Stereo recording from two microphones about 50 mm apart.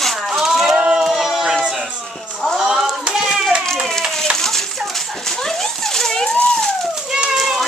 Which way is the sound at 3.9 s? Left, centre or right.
Centre.